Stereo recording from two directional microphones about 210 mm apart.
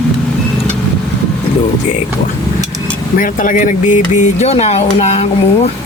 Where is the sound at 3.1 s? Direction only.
40° left (ahead or behind).